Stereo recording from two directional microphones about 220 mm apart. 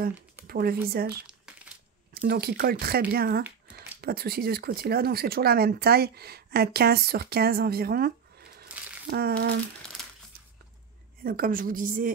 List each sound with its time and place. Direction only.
0.5 s speech: 45° right (ahead or behind)
2.2 s speech: 45° right (ahead or behind)
3.4 s a sound: 5° right (ahead or behind)
4.0 s speech: 45° right (ahead or behind)
8.5 s crumpling: 45° right (ahead or behind)
11.2 s a woman's voice: 40° right (ahead or behind)